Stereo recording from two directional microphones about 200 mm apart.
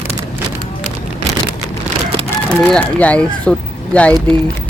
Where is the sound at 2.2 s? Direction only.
10° left (ahead or behind).